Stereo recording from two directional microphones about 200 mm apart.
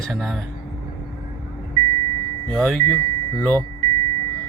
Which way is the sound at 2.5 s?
Centre (ahead or behind).